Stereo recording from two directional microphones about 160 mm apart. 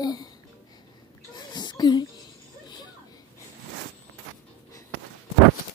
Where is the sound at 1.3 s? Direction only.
25° left (ahead or behind).